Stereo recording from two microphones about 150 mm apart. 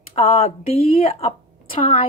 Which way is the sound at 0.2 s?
40° left (ahead or behind).